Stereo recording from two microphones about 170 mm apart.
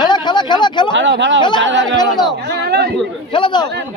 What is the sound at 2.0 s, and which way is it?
Speech, 25° left (ahead or behind).